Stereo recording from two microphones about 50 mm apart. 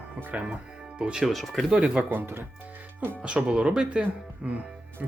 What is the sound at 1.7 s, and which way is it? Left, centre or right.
Speech, centre.